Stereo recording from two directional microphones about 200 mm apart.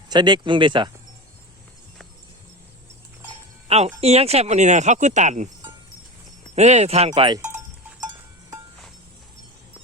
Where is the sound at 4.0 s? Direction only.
30° right (ahead or behind).